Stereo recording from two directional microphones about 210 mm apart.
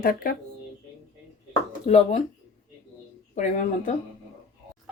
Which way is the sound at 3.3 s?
35° left (ahead or behind).